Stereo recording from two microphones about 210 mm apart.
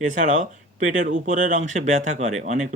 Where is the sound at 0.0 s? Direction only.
35° right (ahead or behind).